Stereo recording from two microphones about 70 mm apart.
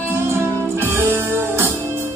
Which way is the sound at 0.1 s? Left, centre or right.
Right.